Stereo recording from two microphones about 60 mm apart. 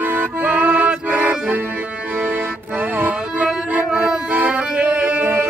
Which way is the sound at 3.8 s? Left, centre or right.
Centre.